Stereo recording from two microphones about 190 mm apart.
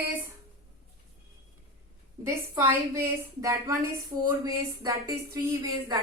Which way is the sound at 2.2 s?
15° right (ahead or behind).